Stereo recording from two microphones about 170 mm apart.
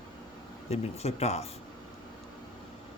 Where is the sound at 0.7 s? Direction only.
40° left (ahead or behind).